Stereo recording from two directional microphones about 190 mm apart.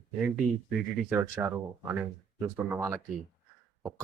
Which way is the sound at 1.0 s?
10° right (ahead or behind).